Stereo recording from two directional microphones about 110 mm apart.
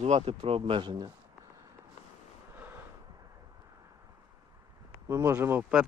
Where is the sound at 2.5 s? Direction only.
20° right (ahead or behind).